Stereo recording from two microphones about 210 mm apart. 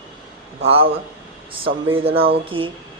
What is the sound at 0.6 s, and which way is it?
A woman's voice, 25° right (ahead or behind).